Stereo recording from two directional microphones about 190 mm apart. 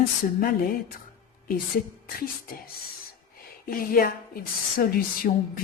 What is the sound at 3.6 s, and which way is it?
Speech, 50° left (ahead or behind).